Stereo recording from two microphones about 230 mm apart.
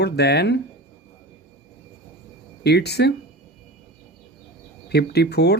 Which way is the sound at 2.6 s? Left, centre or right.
Left.